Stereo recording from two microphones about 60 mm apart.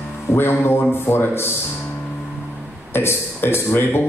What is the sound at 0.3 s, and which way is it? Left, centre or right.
Speech, left.